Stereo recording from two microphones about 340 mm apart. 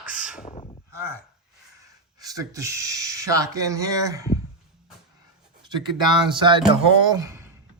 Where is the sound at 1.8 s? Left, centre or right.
Centre.